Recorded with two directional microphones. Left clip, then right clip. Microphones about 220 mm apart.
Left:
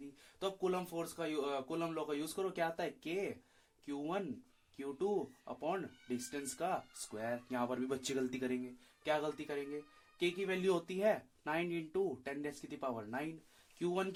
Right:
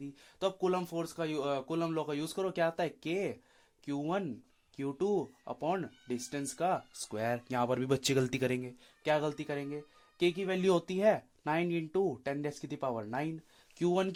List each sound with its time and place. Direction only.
0.3 s speech: 45° right (ahead or behind)